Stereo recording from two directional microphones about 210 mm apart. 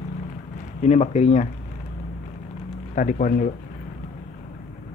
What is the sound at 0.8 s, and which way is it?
Speech, 35° left (ahead or behind).